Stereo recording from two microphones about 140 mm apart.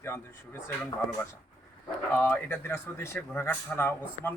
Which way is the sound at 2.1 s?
10° left (ahead or behind).